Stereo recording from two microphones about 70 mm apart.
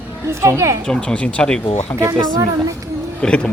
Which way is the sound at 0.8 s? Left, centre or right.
Centre.